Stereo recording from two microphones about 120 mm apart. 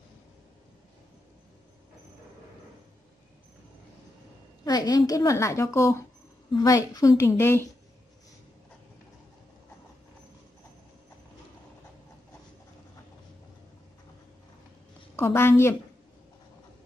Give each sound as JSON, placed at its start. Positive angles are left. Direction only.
{"t": 4.6, "sound": "a woman's voice", "side_deg": 35}
{"t": 15.1, "sound": "a woman's voice", "side_deg": 20}